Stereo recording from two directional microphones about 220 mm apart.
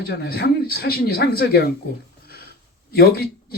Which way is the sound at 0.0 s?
45° left (ahead or behind).